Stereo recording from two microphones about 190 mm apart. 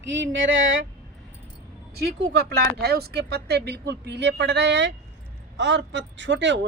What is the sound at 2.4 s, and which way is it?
A man's voice, 55° right (ahead or behind).